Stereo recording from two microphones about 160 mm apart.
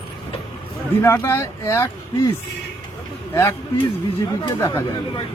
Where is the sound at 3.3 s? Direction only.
15° left (ahead or behind).